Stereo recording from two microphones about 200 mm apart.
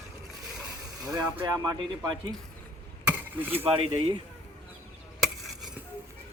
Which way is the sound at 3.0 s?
10° right (ahead or behind).